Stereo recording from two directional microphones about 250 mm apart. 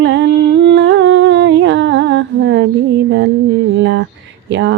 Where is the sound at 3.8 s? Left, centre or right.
Right.